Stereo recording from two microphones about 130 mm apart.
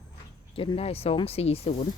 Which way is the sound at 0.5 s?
45° left (ahead or behind).